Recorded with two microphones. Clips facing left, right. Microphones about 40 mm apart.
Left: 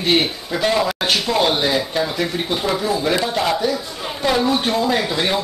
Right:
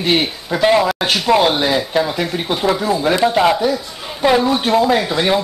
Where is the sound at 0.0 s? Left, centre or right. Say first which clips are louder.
Right 1 dB; centre.